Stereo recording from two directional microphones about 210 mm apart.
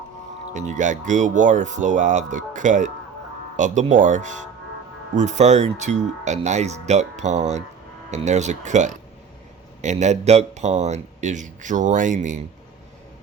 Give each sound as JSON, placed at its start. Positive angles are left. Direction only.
{"t": 0.5, "sound": "speech", "side_deg": -35}